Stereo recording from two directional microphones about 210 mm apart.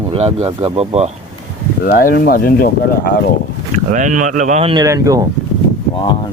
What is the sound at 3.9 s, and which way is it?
Speech, 40° right (ahead or behind).